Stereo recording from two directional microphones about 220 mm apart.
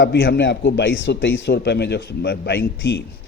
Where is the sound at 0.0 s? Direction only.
55° left (ahead or behind).